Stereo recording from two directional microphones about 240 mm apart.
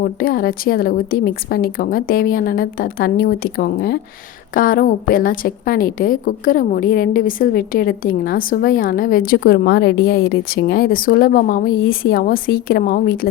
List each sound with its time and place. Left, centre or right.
0.0 s a woman's voice: left